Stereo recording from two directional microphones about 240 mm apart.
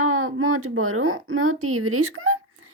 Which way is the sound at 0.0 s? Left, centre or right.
Right.